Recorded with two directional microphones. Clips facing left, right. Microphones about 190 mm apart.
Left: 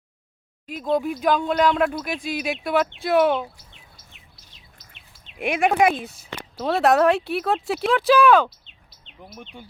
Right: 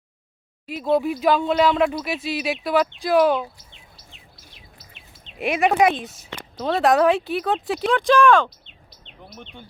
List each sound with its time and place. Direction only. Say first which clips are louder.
0.7 s speech: right 2 dB; 5° right (ahead or behind)
5.4 s speech: right 1 dB; centre (ahead or behind)